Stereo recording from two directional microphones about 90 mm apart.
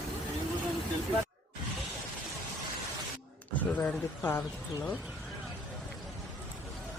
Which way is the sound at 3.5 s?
20° left (ahead or behind).